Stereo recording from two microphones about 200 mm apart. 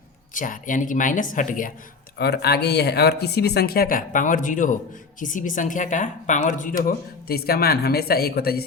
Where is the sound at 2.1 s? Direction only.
55° left (ahead or behind).